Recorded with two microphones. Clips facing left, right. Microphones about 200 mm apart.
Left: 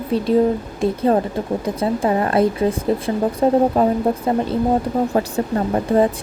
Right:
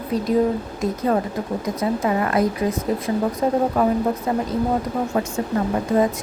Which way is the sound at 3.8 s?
30° left (ahead or behind).